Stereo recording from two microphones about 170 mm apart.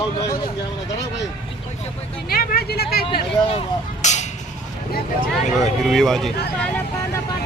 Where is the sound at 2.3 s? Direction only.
60° left (ahead or behind).